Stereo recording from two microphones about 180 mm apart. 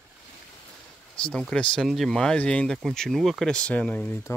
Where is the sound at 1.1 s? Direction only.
5° left (ahead or behind).